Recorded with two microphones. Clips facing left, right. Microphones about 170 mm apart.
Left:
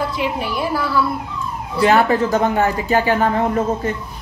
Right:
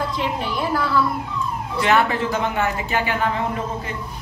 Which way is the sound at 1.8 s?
35° left (ahead or behind).